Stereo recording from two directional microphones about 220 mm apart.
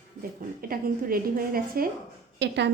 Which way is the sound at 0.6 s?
40° right (ahead or behind).